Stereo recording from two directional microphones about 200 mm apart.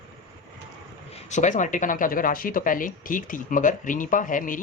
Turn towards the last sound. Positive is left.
turn(degrees=40)  # may be behind; listen again after turning